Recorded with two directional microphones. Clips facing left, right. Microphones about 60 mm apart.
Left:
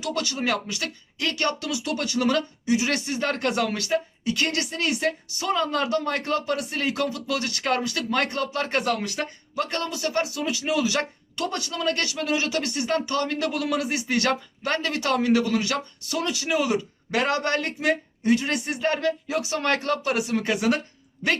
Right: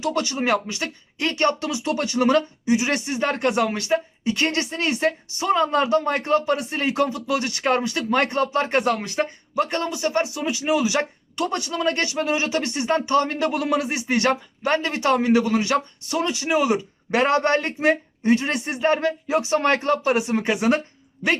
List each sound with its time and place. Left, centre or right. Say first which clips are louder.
0.0 s speech: right 4 dB; right